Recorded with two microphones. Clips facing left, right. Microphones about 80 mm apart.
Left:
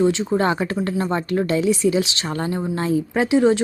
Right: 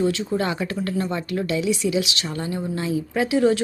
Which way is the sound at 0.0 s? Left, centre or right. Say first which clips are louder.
Left 4 dB; left.